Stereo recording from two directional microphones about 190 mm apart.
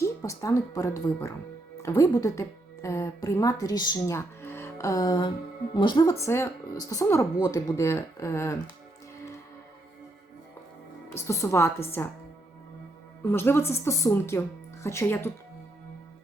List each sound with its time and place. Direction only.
0.0 s a woman's voice: 15° left (ahead or behind)
11.1 s speech: 15° left (ahead or behind)
13.2 s speech: 10° left (ahead or behind)